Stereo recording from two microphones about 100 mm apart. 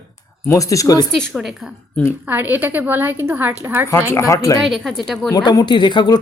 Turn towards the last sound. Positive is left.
turn(degrees=50)  # may be behind; listen again after turning